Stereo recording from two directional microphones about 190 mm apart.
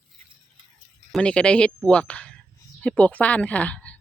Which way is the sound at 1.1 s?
5° left (ahead or behind).